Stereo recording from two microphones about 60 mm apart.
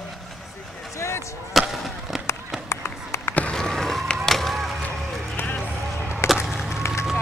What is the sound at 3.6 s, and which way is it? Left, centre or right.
Vehicle, centre.